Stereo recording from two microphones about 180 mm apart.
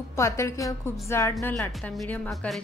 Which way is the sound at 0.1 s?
15° left (ahead or behind).